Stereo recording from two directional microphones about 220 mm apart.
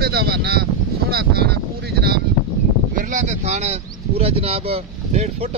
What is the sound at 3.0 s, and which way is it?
Speech, 35° right (ahead or behind).